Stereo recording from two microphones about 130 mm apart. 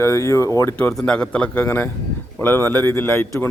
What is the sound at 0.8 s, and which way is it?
Speech, 10° left (ahead or behind).